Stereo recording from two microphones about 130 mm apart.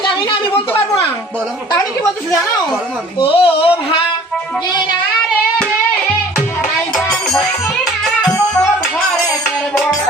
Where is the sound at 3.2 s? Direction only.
45° left (ahead or behind).